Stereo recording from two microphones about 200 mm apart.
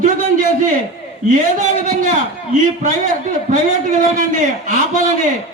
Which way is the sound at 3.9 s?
40° right (ahead or behind).